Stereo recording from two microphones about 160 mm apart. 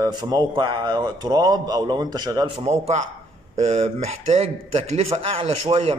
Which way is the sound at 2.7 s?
45° right (ahead or behind).